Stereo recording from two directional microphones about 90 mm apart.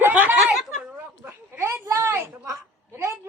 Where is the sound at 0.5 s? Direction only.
Centre (ahead or behind).